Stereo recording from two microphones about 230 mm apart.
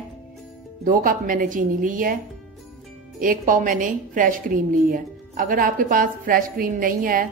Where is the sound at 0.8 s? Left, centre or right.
Right.